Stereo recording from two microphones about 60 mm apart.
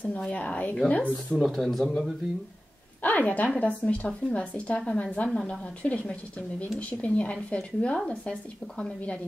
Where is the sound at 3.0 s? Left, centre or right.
Left.